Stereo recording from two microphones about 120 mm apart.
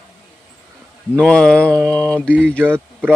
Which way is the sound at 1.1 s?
5° left (ahead or behind).